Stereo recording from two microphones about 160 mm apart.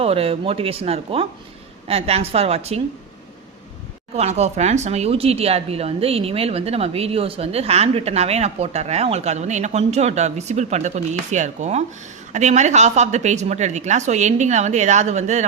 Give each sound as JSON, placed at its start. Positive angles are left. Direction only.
{"t": 0.0, "sound": "speech", "side_deg": -40}
{"t": 4.1, "sound": "a woman's voice", "side_deg": -45}